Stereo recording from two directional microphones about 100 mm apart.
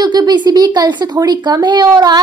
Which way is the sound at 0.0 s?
45° right (ahead or behind).